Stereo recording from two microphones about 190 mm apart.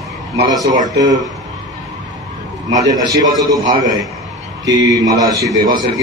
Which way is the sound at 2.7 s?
20° right (ahead or behind).